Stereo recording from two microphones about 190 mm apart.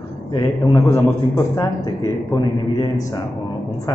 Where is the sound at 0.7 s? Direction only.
15° left (ahead or behind).